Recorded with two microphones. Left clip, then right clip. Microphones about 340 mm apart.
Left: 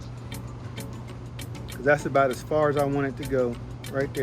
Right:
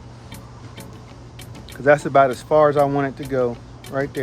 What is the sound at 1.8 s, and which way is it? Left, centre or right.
Speech, right.